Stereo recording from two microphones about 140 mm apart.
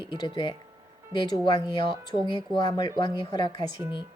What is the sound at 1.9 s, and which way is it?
Speech, 30° left (ahead or behind).